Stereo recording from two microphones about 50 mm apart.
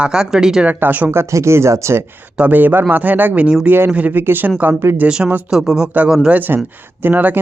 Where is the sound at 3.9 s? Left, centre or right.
Right.